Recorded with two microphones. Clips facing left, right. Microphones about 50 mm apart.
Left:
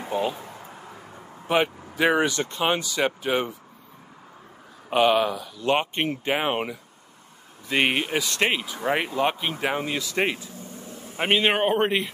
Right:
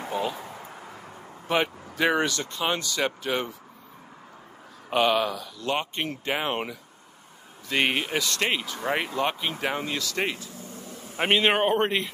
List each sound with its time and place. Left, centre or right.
0.1 s speech: centre
1.5 s speech: centre
2.3 s speech: left
2.8 s speech: centre
4.8 s speech: centre
5.7 s speech: left
11.1 s a man's voice: centre